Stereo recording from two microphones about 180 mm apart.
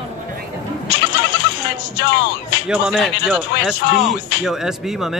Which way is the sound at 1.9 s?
65° left (ahead or behind).